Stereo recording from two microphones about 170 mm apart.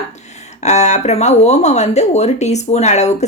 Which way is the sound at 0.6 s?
40° left (ahead or behind).